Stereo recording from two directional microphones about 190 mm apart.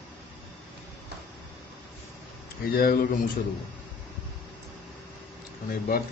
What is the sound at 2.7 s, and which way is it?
Speech, 50° left (ahead or behind).